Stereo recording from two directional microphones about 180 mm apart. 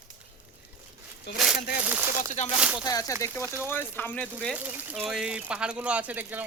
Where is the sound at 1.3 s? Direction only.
5° right (ahead or behind).